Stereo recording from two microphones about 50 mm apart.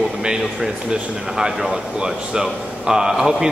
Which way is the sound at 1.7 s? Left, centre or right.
Centre.